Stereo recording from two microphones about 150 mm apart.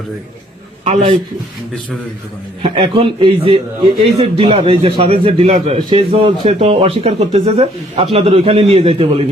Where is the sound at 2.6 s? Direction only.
35° right (ahead or behind).